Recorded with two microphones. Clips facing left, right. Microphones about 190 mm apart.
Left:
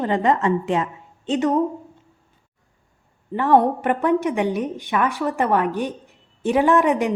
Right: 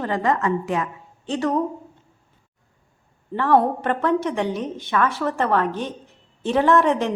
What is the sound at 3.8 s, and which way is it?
A woman's voice, 15° left (ahead or behind).